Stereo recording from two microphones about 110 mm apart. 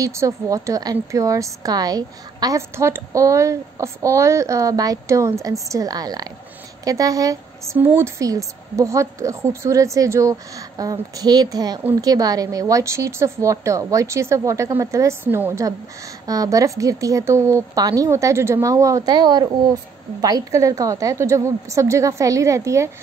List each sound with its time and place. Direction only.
0.0 s a woman's voice: 30° right (ahead or behind)
2.7 s a woman's voice: 25° right (ahead or behind)